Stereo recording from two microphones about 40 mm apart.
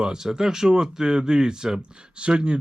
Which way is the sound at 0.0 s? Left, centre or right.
Centre.